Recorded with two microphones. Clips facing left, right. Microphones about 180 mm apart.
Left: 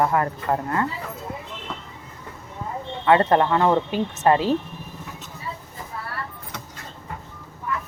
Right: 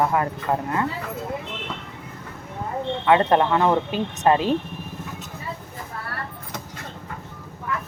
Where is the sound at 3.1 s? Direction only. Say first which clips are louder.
Left 1 dB; 15° right (ahead or behind).